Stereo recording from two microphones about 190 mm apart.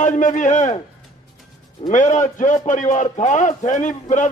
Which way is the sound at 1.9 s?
40° left (ahead or behind).